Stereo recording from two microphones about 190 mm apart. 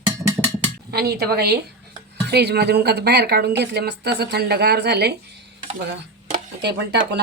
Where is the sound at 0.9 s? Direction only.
55° right (ahead or behind).